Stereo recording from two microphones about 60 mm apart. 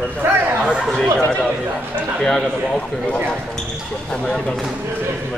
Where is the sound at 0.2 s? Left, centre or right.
Right.